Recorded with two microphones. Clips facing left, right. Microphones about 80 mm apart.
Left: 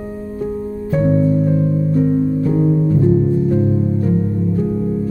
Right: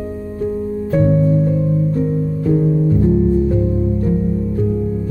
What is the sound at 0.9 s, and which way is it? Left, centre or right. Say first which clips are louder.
Music: right 1 dB; centre.